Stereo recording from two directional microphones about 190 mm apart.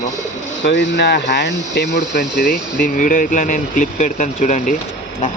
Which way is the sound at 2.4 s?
45° left (ahead or behind).